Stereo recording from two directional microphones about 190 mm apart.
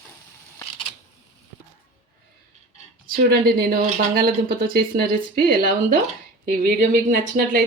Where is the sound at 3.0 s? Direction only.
50° right (ahead or behind).